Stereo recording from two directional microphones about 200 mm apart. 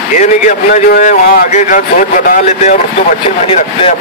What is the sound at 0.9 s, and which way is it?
Speech, 35° left (ahead or behind).